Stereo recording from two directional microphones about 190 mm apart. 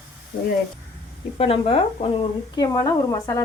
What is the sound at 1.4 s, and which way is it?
A woman's voice, 30° left (ahead or behind).